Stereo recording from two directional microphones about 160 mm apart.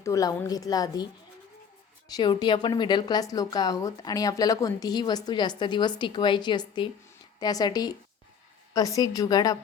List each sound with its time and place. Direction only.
0.0 s a woman's voice: 20° left (ahead or behind)